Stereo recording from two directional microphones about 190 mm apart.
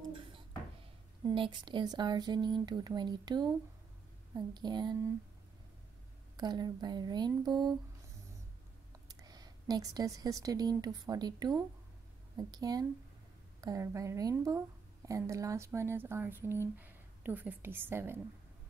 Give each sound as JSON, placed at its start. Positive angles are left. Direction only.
{"t": 1.2, "sound": "speech", "side_deg": -25}
{"t": 4.6, "sound": "speech", "side_deg": -20}
{"t": 6.3, "sound": "speech", "side_deg": -20}
{"t": 9.1, "sound": "speech", "side_deg": -20}